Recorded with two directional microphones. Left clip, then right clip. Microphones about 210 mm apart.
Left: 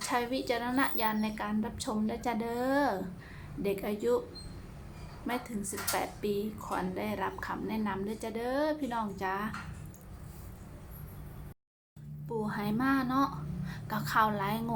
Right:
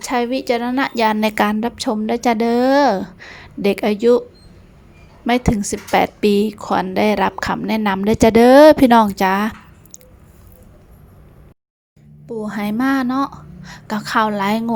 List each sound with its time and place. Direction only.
0.1 s a woman's voice: 35° right (ahead or behind)
1.7 s a woman's voice: 35° right (ahead or behind)
5.2 s a woman's voice: 40° right (ahead or behind)
12.3 s a woman's voice: 30° right (ahead or behind)